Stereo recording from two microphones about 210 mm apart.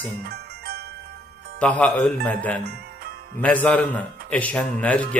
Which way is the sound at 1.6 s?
5° left (ahead or behind).